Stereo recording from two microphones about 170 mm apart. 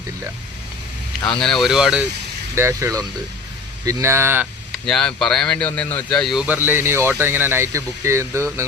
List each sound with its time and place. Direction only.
1.3 s speech: 5° left (ahead or behind)
2.6 s speech: 15° right (ahead or behind)
4.7 s speech: 5° left (ahead or behind); by 8.4 s 15° right (ahead or behind)